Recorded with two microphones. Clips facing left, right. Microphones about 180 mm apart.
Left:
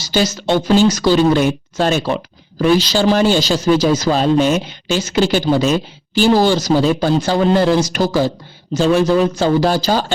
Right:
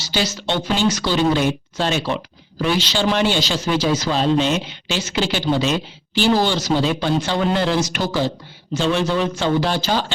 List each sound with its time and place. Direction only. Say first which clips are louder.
0.1 s speech: left 6 dB; 45° left (ahead or behind)